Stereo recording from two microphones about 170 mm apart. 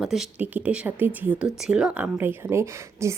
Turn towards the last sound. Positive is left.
turn(degrees=-15)  # may be behind; listen again after turning